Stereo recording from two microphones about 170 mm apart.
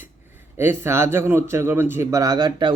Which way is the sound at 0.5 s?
15° right (ahead or behind).